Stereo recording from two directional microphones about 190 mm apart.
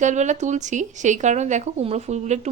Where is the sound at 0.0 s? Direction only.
40° right (ahead or behind).